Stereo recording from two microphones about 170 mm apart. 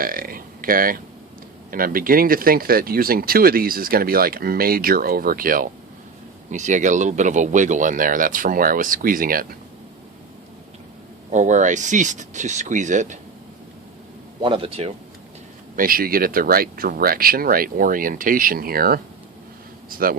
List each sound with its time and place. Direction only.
0.0 s speech: 55° right (ahead or behind)
11.3 s speech: 45° right (ahead or behind)
14.4 s speech: 30° right (ahead or behind)
15.7 s speech: 55° right (ahead or behind)